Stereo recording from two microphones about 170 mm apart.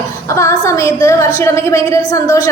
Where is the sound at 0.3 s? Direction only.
15° left (ahead or behind).